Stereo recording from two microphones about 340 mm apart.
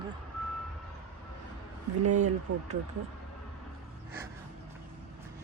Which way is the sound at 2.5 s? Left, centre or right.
Right.